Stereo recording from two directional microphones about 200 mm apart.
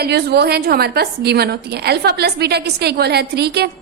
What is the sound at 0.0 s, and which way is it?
A woman's voice, 55° right (ahead or behind).